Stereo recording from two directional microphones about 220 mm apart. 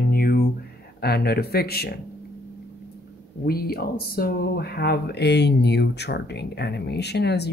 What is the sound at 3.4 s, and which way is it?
Speech, 45° left (ahead or behind).